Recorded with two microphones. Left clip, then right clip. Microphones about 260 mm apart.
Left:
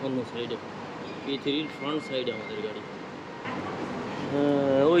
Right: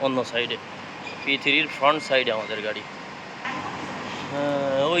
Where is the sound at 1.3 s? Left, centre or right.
Right.